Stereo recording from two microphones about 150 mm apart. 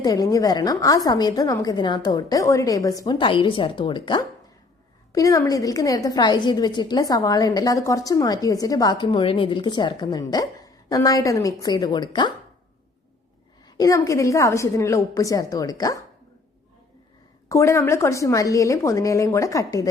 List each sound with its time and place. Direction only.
0.0 s a woman's voice: 25° left (ahead or behind)
13.7 s a woman's voice: 25° left (ahead or behind)
17.5 s a woman's voice: 20° left (ahead or behind)